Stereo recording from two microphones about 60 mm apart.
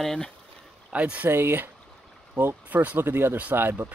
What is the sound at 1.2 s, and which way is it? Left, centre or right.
Speech, right.